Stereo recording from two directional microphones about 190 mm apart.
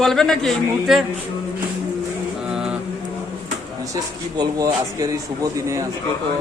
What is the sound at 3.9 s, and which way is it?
Speech, 20° right (ahead or behind).